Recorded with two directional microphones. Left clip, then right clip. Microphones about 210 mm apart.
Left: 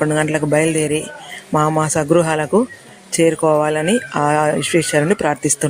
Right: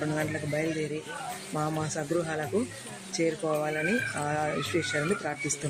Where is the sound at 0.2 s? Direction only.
45° left (ahead or behind).